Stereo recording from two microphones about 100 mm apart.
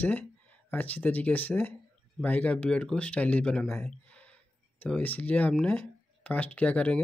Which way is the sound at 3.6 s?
25° left (ahead or behind).